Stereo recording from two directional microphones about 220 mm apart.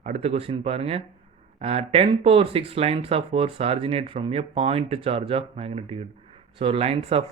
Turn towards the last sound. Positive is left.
turn(degrees=-25)  # may be behind; listen again after turning